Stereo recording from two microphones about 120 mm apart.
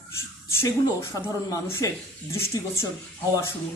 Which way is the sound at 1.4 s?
25° left (ahead or behind).